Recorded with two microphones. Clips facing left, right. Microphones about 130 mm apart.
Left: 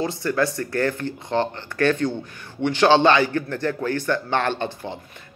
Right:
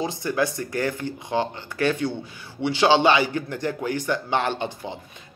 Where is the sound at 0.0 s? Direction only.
15° right (ahead or behind).